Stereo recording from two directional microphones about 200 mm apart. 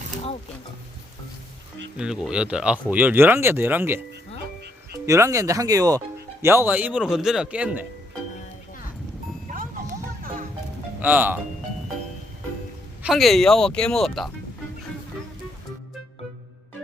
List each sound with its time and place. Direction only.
2.0 s speech: 5° right (ahead or behind)
5.0 s speech: 15° right (ahead or behind)
11.0 s speech: 10° right (ahead or behind)
13.0 s speech: centre (ahead or behind)